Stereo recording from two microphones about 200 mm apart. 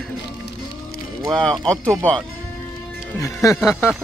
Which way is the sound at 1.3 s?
5° left (ahead or behind).